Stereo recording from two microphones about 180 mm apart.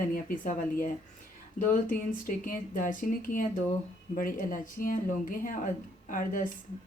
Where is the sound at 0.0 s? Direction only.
50° left (ahead or behind).